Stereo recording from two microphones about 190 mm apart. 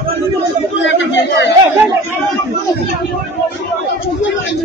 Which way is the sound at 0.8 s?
70° left (ahead or behind).